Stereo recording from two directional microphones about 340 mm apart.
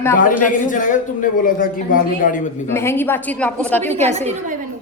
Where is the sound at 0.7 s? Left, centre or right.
Left.